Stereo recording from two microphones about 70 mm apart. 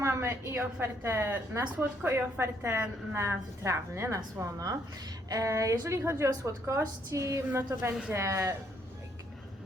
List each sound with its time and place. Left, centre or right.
0.0 s a woman's voice: right
1.6 s a woman's voice: right
2.4 s a woman's voice: right
4.4 s a woman's voice: right
7.7 s a woman's voice: right
8.1 s a woman's voice: right